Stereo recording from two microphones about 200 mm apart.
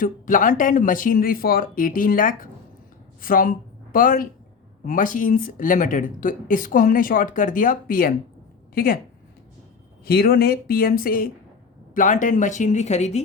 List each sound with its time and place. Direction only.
0.0 s speech: 40° left (ahead or behind)
10.1 s speech: 50° left (ahead or behind); by 13.2 s 35° left (ahead or behind)